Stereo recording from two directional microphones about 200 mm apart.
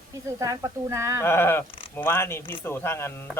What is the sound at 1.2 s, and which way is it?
A man's voice, 10° left (ahead or behind).